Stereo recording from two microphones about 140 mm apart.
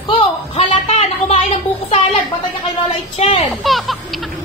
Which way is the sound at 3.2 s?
50° left (ahead or behind).